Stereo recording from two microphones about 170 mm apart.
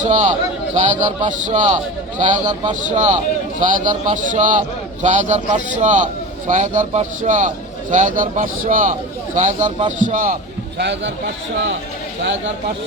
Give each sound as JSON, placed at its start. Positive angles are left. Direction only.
{"t": 0.0, "sound": "a man's voice", "side_deg": -45}
{"t": 2.4, "sound": "a man's voice", "side_deg": -25}
{"t": 2.8, "sound": "a man's voice", "side_deg": -45}
{"t": 10.8, "sound": "a man's voice", "side_deg": -90}